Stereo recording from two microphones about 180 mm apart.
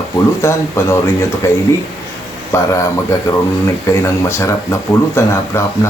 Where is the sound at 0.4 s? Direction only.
15° left (ahead or behind).